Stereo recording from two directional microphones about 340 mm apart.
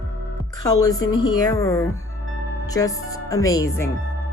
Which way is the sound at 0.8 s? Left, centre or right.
Centre.